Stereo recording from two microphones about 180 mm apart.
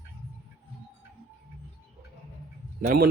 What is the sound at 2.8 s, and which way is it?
Speech, 55° right (ahead or behind).